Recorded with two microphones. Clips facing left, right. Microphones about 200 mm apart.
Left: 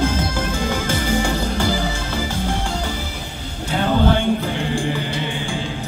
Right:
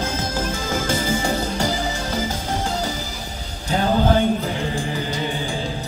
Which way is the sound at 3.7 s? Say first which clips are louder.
Even; 40° right (ahead or behind).